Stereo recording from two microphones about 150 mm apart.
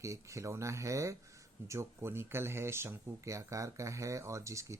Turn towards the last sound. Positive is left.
turn(degrees=-20)  # may be behind; listen again after turning